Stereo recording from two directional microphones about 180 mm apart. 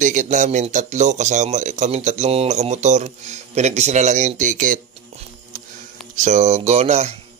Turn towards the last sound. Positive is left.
turn(degrees=-40)  # may be behind; listen again after turning